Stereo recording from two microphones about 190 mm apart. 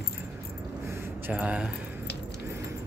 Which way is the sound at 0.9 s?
10° right (ahead or behind).